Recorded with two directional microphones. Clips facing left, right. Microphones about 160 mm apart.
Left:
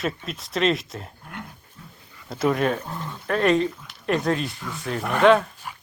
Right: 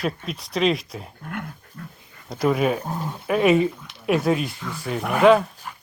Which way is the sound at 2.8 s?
35° right (ahead or behind).